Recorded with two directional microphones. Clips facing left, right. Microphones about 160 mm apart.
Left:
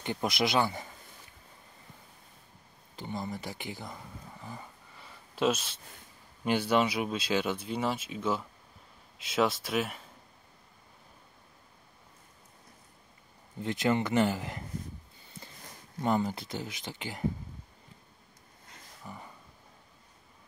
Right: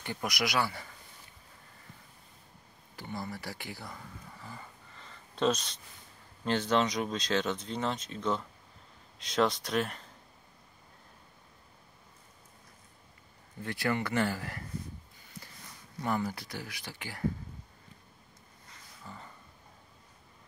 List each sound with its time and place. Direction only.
0.0 s speech: 25° left (ahead or behind)
3.0 s a sound: 20° left (ahead or behind)
6.4 s speech: 10° left (ahead or behind)
13.6 s speech: 20° left (ahead or behind)
16.0 s speech: 20° left (ahead or behind)
19.0 s speech: 15° left (ahead or behind)